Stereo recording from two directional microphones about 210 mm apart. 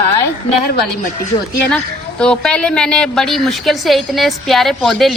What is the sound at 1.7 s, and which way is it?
A woman's voice, 5° left (ahead or behind).